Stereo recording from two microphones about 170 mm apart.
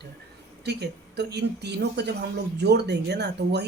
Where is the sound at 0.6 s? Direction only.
80° right.